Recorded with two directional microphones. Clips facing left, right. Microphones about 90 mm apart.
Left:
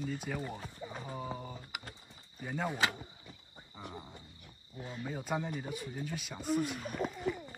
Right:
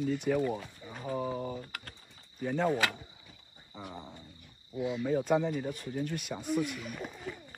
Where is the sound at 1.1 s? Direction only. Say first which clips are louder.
Right 10 dB; centre (ahead or behind).